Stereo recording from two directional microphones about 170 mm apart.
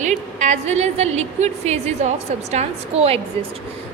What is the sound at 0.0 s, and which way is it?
A woman's voice, 45° right (ahead or behind).